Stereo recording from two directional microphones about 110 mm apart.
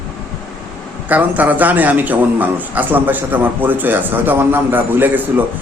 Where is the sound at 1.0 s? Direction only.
15° right (ahead or behind).